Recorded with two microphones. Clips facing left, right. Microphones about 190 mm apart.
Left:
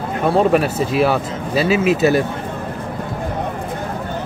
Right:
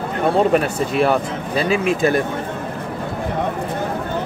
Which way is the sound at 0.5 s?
5° left (ahead or behind).